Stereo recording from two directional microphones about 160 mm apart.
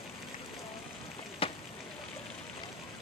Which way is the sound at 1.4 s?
35° left (ahead or behind).